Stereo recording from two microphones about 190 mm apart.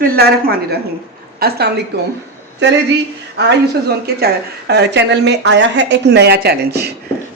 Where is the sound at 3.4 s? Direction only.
60° right (ahead or behind).